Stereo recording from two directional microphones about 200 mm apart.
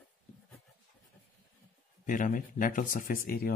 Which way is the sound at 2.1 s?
40° left (ahead or behind).